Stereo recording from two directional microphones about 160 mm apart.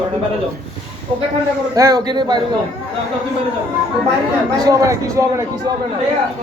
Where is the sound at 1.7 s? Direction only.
25° right (ahead or behind).